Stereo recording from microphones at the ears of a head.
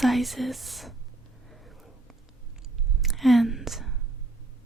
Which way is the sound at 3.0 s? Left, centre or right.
Centre.